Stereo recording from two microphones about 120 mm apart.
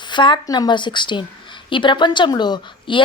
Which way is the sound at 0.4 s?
35° left (ahead or behind).